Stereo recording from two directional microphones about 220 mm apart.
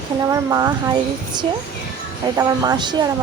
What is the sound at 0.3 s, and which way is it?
Speech, 15° right (ahead or behind).